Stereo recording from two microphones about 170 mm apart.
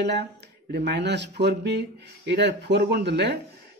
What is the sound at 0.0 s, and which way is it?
Speech, 80° right.